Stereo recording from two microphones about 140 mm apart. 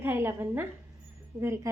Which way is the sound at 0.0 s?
15° right (ahead or behind).